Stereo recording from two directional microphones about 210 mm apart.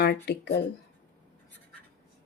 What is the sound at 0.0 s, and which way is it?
Speech, 50° left (ahead or behind).